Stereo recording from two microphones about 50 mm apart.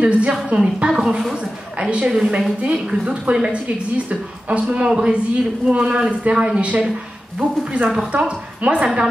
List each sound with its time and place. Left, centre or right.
0.0 s a woman's voice: right